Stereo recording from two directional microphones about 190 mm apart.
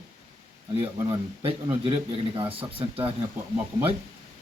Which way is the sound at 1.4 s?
30° right (ahead or behind).